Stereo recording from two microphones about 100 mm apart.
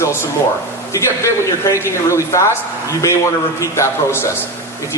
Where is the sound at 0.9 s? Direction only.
30° left (ahead or behind).